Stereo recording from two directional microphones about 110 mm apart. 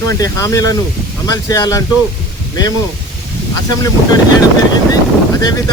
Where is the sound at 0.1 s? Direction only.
30° left (ahead or behind).